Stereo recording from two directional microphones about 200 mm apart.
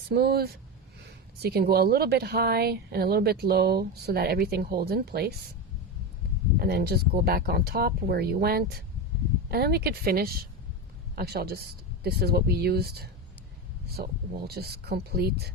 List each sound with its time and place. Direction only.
0.1 s a woman's voice: 50° right (ahead or behind)
6.6 s a woman's voice: 50° right (ahead or behind)